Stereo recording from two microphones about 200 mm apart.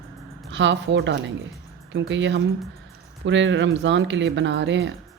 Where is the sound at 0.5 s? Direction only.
65° right (ahead or behind).